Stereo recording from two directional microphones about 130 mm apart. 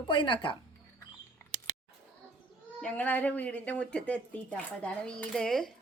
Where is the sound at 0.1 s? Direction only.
40° left (ahead or behind).